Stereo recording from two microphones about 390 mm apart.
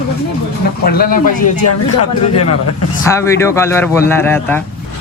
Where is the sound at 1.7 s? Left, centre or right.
Left.